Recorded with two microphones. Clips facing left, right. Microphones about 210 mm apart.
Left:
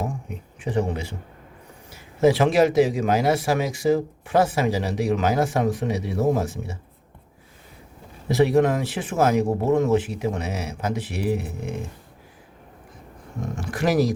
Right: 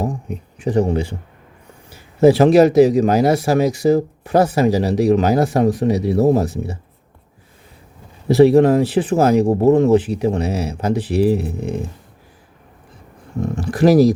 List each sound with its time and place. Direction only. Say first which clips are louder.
0.6 s speech: right 7 dB; 40° right (ahead or behind)
2.2 s speech: right 7 dB; 40° right (ahead or behind)
8.3 s speech: right 8 dB; 35° right (ahead or behind)
13.6 s speech: right 9 dB; 35° right (ahead or behind)